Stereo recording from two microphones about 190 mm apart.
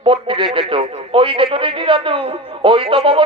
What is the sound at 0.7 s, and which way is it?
A man's voice, 25° right (ahead or behind).